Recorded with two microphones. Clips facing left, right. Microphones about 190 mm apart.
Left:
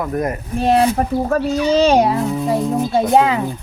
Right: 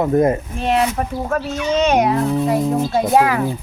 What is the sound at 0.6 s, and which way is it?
Speech, 35° left (ahead or behind).